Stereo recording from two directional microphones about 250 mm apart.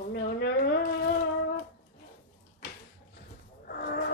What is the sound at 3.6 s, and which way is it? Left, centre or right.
Train, left.